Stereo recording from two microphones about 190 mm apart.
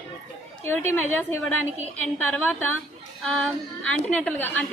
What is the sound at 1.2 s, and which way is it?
A woman's voice, 10° left (ahead or behind).